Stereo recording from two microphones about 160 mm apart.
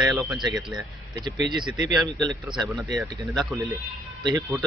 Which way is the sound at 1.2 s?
25° right (ahead or behind).